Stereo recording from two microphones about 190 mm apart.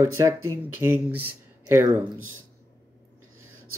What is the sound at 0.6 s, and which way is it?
Speech, 10° right (ahead or behind).